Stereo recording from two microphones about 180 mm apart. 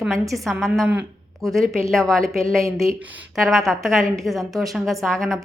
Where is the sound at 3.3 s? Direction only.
Centre (ahead or behind).